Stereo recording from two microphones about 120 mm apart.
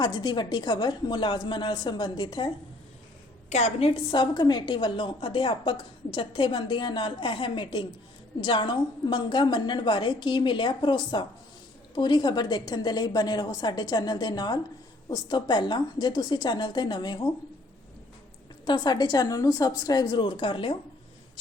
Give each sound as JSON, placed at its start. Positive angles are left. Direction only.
{"t": 0.0, "sound": "a woman's voice", "side_deg": 35}
{"t": 3.5, "sound": "a woman's voice", "side_deg": 60}
{"t": 4.1, "sound": "a woman's voice", "side_deg": 35}
{"t": 18.6, "sound": "a woman's voice", "side_deg": 35}